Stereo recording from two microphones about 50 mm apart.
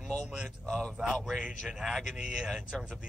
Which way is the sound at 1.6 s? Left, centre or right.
Centre.